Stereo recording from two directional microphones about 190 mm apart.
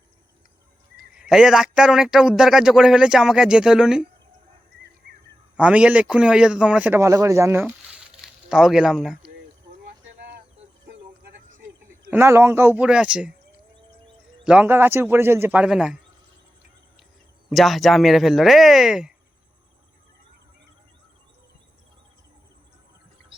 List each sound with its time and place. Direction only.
1.2 s speech: 5° right (ahead or behind)
5.5 s a man's voice: 5° right (ahead or behind)
10.8 s a sound: 55° right (ahead or behind)
12.1 s a man's voice: 10° right (ahead or behind)
17.5 s speech: centre (ahead or behind)